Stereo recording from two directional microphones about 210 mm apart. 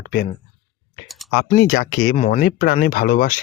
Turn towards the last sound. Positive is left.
turn(degrees=45)  # may be behind; listen again after turning